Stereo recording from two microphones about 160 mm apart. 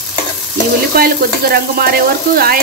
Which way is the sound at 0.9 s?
75° right (ahead or behind).